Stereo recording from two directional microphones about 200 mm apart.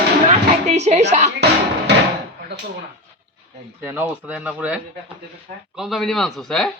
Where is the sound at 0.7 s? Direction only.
35° right (ahead or behind).